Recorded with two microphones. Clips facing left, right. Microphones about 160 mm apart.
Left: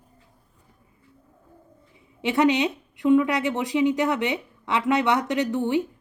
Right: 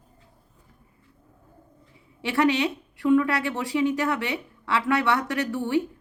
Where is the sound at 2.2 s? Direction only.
20° left (ahead or behind).